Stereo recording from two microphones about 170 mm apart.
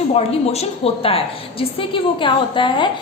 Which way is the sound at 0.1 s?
35° left (ahead or behind).